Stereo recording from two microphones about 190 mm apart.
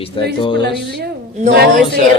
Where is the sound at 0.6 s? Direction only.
60° right (ahead or behind).